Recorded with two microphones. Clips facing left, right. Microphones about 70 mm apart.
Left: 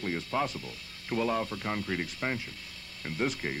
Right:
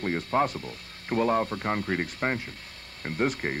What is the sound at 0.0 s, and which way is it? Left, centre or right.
Speech, right.